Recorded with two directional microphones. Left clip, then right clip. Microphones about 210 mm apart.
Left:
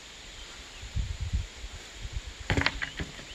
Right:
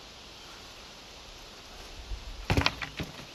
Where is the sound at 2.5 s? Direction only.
40° right (ahead or behind).